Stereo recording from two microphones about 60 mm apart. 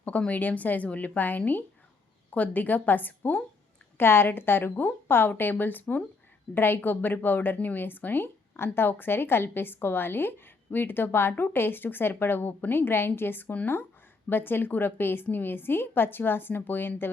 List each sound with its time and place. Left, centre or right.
0.0 s speech: left
3.9 s a woman's voice: left